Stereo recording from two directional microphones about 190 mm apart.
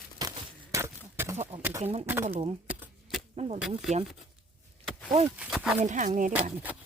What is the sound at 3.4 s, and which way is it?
Speech, 35° right (ahead or behind).